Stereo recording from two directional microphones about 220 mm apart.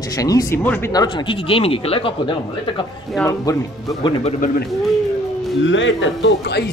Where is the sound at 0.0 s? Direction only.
15° left (ahead or behind).